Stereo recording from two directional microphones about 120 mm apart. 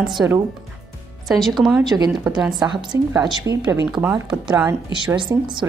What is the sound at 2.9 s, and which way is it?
Speech, 25° right (ahead or behind).